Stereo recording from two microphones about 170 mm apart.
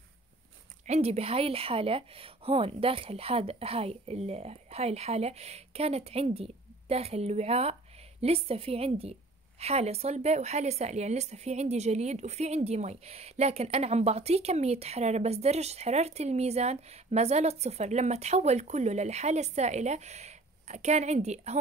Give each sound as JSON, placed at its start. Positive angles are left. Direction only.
{"t": 0.8, "sound": "speech", "side_deg": -40}